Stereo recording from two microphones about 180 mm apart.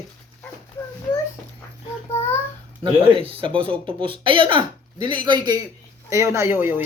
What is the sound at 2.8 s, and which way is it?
Speech, 30° right (ahead or behind).